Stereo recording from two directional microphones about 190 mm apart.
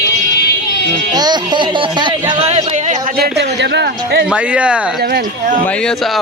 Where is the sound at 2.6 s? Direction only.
35° right (ahead or behind); by 3.9 s 65° right (ahead or behind).